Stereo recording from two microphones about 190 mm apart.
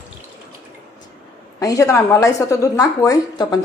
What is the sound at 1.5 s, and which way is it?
A woman's voice, 15° left (ahead or behind).